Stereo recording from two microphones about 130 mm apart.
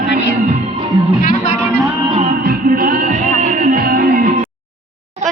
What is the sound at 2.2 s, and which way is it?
Music, 90° right.